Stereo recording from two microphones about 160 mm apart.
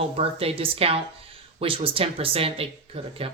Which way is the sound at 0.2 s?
35° right (ahead or behind).